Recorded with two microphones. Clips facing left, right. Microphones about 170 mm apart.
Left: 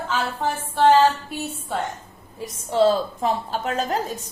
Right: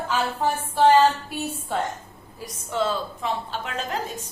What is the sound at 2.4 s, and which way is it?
A woman's voice, 35° left (ahead or behind).